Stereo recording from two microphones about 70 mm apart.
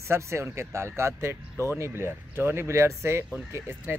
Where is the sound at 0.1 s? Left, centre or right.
Right.